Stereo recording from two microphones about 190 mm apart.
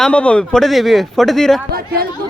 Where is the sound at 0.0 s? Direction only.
5° left (ahead or behind).